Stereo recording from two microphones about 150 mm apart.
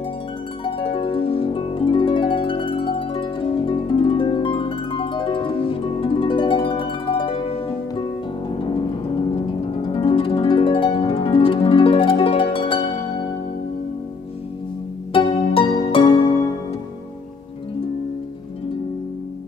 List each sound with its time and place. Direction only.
0.7 s harp: 35° left (ahead or behind)
8.5 s music: 30° left (ahead or behind)
9.8 s harp: 35° left (ahead or behind)
15.1 s music: 35° left (ahead or behind)